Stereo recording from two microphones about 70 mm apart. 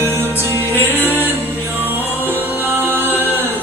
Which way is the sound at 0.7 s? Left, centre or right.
Left.